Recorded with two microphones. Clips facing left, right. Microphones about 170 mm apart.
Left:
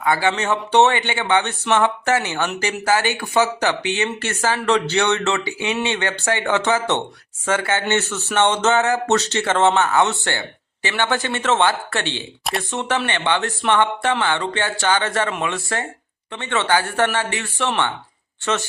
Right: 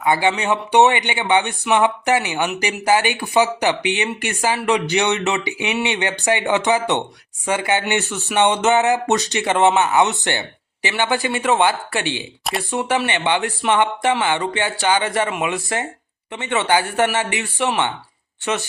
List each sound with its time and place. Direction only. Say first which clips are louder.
0.0 s speech: right 1 dB; 20° right (ahead or behind)